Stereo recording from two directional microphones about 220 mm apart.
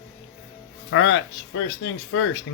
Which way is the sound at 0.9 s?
60° left (ahead or behind).